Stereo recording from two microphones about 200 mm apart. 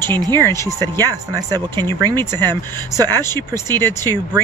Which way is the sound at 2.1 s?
10° left (ahead or behind).